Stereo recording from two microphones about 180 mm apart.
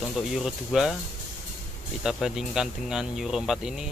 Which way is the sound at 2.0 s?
5° right (ahead or behind).